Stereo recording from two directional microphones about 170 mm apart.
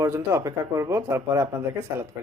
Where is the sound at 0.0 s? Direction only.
15° right (ahead or behind).